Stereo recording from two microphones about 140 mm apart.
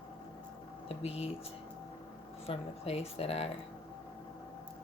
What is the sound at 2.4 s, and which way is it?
Speech, 45° left (ahead or behind).